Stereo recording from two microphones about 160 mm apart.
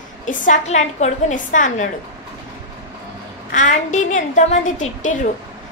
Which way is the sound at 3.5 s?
50° left (ahead or behind).